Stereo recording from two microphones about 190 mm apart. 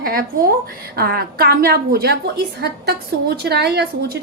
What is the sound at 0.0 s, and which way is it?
A woman's voice, 50° right (ahead or behind).